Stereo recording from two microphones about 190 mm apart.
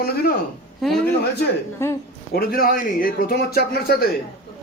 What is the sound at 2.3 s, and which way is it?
A man's voice, 55° left (ahead or behind).